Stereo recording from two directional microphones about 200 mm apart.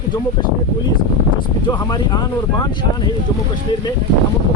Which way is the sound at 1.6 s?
20° left (ahead or behind).